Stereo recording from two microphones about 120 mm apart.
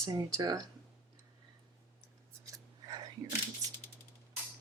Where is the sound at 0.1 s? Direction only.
30° right (ahead or behind).